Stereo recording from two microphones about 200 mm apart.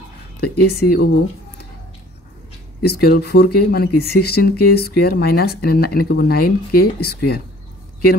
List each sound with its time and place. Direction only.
0.4 s speech: 50° left (ahead or behind)
2.8 s speech: 50° left (ahead or behind)